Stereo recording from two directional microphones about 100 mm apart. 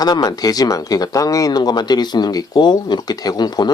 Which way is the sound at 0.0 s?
40° left (ahead or behind).